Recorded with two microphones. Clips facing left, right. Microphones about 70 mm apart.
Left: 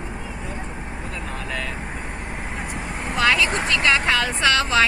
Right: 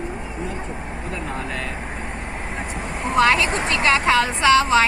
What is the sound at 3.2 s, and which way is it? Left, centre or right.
A woman's voice, right.